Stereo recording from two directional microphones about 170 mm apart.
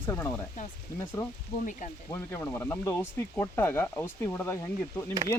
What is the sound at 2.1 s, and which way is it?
Speech, 15° left (ahead or behind).